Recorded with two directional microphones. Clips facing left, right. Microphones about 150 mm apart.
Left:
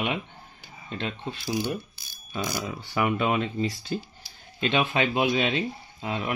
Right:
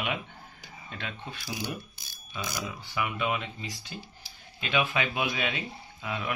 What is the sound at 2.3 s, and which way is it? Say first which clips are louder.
Speech: left 5 dB; 45° left (ahead or behind).